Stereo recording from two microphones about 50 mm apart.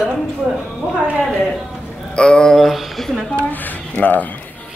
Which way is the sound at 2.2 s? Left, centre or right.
Centre.